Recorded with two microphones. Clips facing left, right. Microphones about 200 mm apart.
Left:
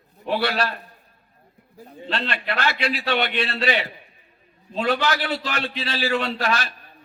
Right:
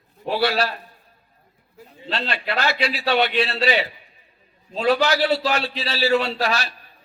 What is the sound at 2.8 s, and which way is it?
Speech, 50° left (ahead or behind).